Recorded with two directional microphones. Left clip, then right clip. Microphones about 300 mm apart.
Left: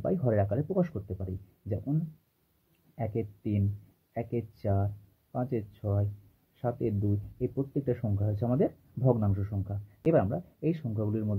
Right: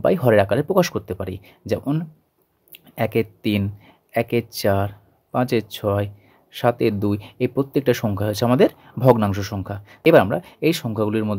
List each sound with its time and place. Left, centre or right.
0.0 s speech: right
3.0 s speech: right